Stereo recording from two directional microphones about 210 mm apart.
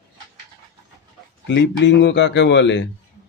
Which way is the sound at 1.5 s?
55° left (ahead or behind).